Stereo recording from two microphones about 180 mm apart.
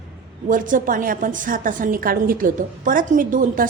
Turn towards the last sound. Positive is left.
turn(degrees=-50)  # may be behind; listen again after turning